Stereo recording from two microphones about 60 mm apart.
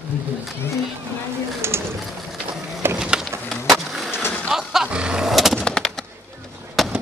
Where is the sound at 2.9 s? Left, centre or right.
Centre.